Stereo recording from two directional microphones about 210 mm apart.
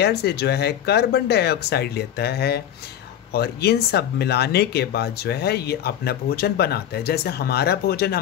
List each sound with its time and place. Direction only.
0.0 s speech: 50° left (ahead or behind)